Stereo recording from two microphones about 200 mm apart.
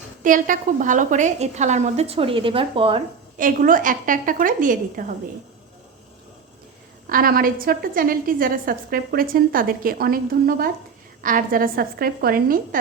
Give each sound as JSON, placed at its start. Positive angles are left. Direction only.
{"t": 0.2, "sound": "a woman's voice", "side_deg": -40}
{"t": 3.3, "sound": "a woman's voice", "side_deg": -45}
{"t": 7.1, "sound": "a woman's voice", "side_deg": -45}